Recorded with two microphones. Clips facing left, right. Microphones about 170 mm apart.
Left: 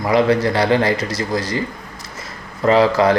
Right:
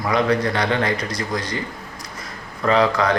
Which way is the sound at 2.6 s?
30° left (ahead or behind).